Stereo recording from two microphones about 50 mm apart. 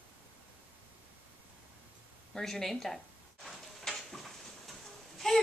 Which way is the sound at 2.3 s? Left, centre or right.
Centre.